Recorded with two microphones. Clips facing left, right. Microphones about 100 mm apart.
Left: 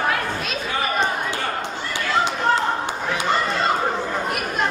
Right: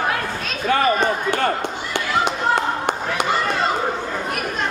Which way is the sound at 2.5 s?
60° right (ahead or behind).